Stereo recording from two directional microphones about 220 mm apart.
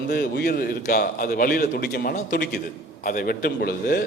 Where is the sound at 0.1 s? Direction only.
45° left (ahead or behind).